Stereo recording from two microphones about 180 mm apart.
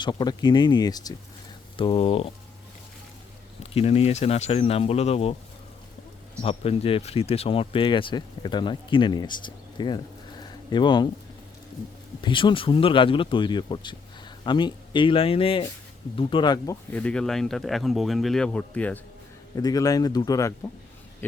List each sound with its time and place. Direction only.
0.0 s speech: 25° left (ahead or behind)
3.6 s speech: 35° left (ahead or behind)
6.4 s speech: 35° left (ahead or behind)
12.2 s speech: 25° left (ahead or behind)
16.9 s speech: 5° left (ahead or behind)
19.5 s speech: 20° left (ahead or behind)